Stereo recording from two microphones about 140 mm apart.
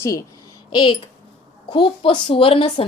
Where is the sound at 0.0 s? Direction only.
20° left (ahead or behind).